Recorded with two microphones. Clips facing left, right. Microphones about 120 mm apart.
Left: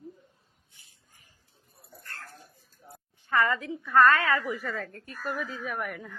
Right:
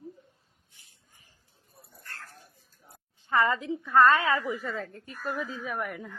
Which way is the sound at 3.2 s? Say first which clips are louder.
Right 1 dB; 20° right (ahead or behind).